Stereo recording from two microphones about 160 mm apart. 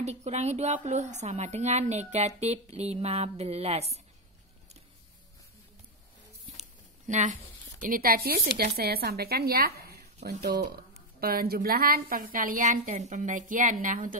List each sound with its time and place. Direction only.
0.0 s a woman's voice: 45° right (ahead or behind)
7.1 s a woman's voice: 50° right (ahead or behind)
7.8 s a woman's voice: 65° right (ahead or behind); by 10.7 s 80° right
11.1 s a woman's voice: 70° right (ahead or behind); by 14.1 s 50° right (ahead or behind)